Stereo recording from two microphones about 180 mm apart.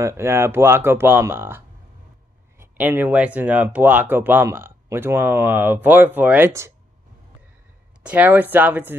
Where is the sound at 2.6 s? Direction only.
10° right (ahead or behind).